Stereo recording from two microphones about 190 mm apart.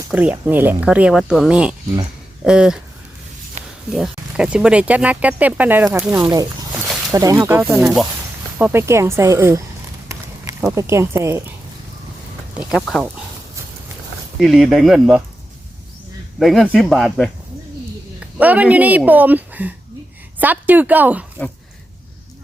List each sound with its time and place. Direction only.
0.1 s speech: 10° right (ahead or behind)
3.6 s a sound: 40° right (ahead or behind)
3.9 s speech: 5° right (ahead or behind)
6.1 s speech: 15° right (ahead or behind)
6.8 s a sound: 5° right (ahead or behind)
7.1 s speech: 15° right (ahead or behind)
10.8 s speech: 15° right (ahead or behind)
12.5 s speech: centre (ahead or behind)
14.3 s speech: centre (ahead or behind)
16.4 s speech: centre (ahead or behind)